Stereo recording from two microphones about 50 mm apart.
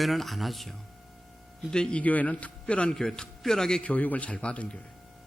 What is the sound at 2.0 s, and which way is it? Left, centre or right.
Speech, left.